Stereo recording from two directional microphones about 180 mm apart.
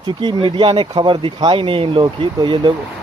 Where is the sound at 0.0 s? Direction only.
25° right (ahead or behind).